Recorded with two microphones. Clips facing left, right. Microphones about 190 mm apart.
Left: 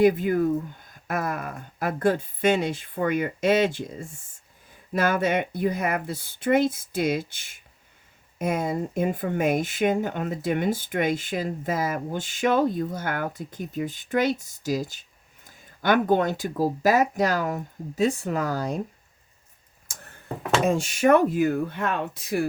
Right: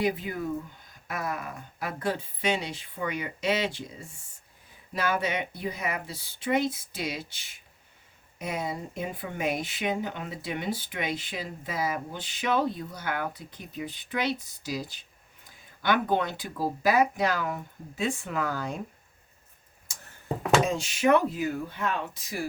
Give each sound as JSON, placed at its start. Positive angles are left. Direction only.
{"t": 0.0, "sound": "speech", "side_deg": 50}
{"t": 4.9, "sound": "speech", "side_deg": 50}
{"t": 19.9, "sound": "a sound", "side_deg": 55}
{"t": 20.7, "sound": "speech", "side_deg": 50}